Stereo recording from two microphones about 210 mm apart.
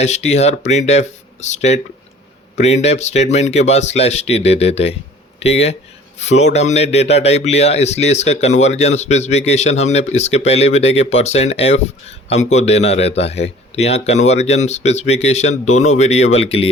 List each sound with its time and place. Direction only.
0.0 s speech: 30° left (ahead or behind)